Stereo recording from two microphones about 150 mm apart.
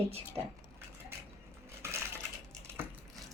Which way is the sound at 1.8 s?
15° right (ahead or behind).